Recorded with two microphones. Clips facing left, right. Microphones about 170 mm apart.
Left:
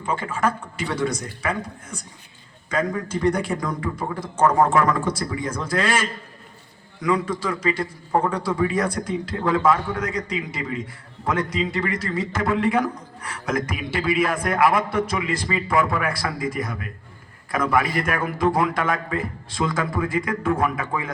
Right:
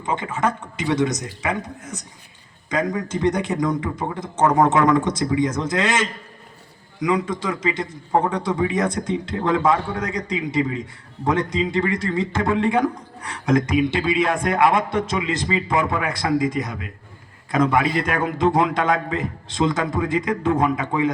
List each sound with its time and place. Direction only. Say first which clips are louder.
0.0 s speech: right 1 dB; 25° right (ahead or behind)
2.6 s speech: right 1 dB; 15° right (ahead or behind)